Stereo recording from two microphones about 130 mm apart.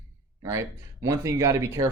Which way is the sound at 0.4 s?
25° right (ahead or behind).